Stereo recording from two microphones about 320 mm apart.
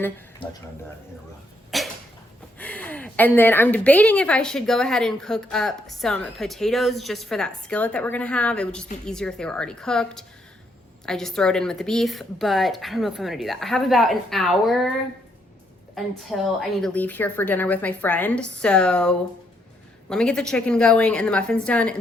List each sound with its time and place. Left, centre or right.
0.4 s speech: centre
1.7 s sneeze: centre
2.6 s a woman's voice: centre
16.0 s a woman's voice: centre